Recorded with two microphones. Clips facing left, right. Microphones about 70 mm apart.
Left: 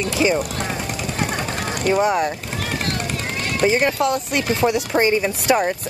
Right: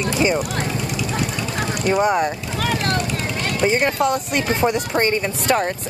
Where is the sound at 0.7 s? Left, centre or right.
Left.